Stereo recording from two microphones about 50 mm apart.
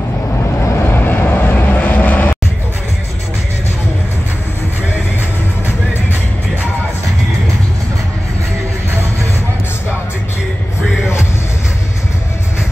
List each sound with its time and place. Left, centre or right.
0.8 s vehicle: left